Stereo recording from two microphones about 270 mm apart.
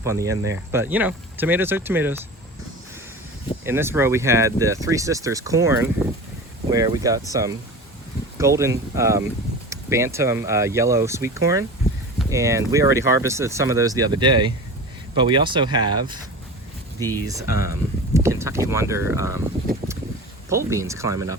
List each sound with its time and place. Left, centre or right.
0.0 s speech: centre
3.6 s speech: centre
17.0 s speech: centre
17.2 s speech: centre
20.5 s speech: centre